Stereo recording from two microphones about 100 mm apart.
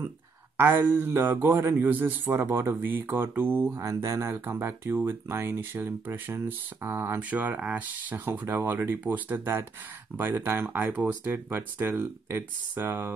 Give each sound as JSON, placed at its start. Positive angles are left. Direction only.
{"t": 0.6, "sound": "speech", "side_deg": -20}
{"t": 3.8, "sound": "speech", "side_deg": -30}
{"t": 7.2, "sound": "speech", "side_deg": -15}